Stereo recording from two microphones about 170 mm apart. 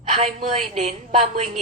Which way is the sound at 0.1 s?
40° right (ahead or behind).